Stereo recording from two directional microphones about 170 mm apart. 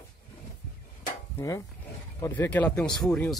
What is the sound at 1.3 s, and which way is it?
Speech, 20° left (ahead or behind).